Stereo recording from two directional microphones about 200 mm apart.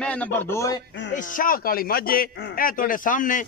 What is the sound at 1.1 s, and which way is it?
A man's voice, 40° left (ahead or behind).